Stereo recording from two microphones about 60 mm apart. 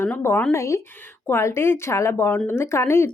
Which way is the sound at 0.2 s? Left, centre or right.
Left.